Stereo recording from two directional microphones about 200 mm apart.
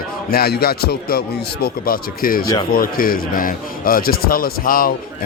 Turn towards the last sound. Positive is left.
turn(degrees=45)  # may be behind; listen again after turning